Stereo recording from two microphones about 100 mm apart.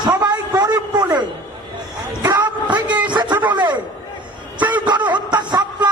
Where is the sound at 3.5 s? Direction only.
45° right (ahead or behind).